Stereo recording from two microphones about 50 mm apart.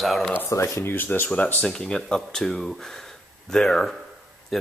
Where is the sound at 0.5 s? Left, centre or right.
Left.